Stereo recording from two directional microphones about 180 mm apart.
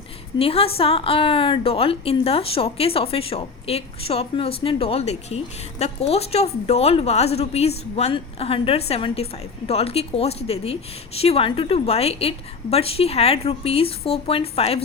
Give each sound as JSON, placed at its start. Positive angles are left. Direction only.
{"t": 0.3, "sound": "a woman's voice", "side_deg": 30}